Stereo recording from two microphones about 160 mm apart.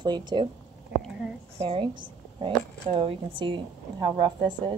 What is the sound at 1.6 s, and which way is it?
A woman's voice, 30° right (ahead or behind).